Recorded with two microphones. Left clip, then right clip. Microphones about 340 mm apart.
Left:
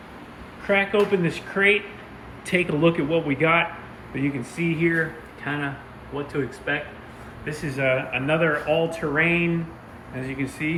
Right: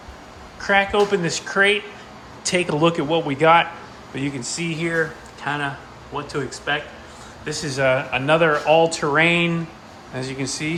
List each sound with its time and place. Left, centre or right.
0.7 s a man's voice: centre
8.4 s speech: right
8.9 s a man's voice: centre